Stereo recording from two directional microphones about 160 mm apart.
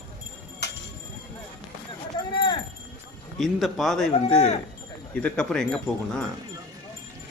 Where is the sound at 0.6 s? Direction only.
90° left.